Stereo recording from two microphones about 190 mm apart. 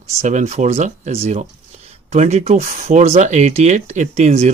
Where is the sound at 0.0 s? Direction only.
35° right (ahead or behind).